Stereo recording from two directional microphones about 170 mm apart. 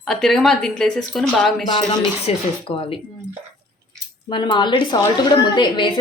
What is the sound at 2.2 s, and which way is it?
Speech, 30° left (ahead or behind).